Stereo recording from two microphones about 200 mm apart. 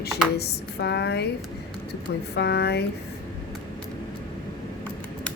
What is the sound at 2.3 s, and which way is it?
Speech, 55° left (ahead or behind).